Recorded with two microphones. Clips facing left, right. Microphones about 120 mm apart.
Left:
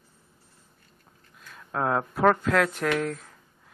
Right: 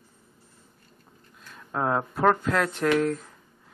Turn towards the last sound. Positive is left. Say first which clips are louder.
# right 4 dB
turn(degrees=0)  # may be behind; listen again after turning